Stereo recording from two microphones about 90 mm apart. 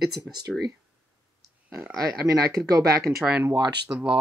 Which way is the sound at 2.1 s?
40° right (ahead or behind).